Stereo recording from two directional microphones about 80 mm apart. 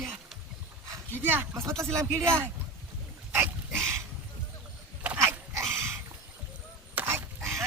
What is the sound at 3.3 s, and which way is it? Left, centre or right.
Dog, right.